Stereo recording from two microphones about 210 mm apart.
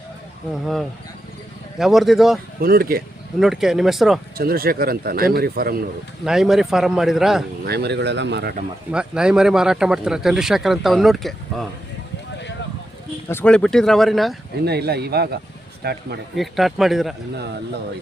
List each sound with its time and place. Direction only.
0.5 s speech: centre (ahead or behind)
2.6 s a man's voice: 45° right (ahead or behind)
3.4 s speech: centre (ahead or behind)
4.4 s a man's voice: 45° right (ahead or behind)
6.2 s speech: centre (ahead or behind)
7.6 s a man's voice: 50° right (ahead or behind)
8.9 s speech: 5° right (ahead or behind)
13.2 s speech: 10° left (ahead or behind)
14.6 s a man's voice: 50° right (ahead or behind)
16.3 s speech: centre (ahead or behind)